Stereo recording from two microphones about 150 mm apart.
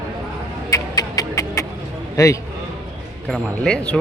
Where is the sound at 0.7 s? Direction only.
25° left (ahead or behind).